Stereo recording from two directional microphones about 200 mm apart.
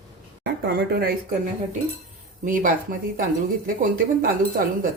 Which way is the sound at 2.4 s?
40° right (ahead or behind).